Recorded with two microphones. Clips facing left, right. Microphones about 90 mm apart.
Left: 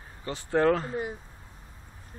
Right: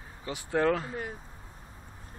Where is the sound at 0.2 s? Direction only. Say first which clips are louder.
Left 2 dB; 10° right (ahead or behind).